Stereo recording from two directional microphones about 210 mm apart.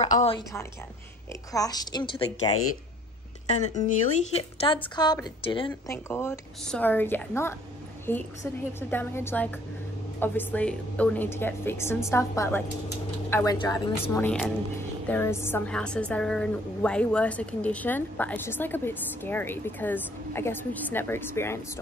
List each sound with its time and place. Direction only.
0.0 s a sound: 30° left (ahead or behind)
0.4 s a woman's voice: 15° left (ahead or behind)
3.7 s speech: 35° left (ahead or behind)
5.7 s a woman's voice: 10° left (ahead or behind)
14.1 s a woman's voice: 10° left (ahead or behind)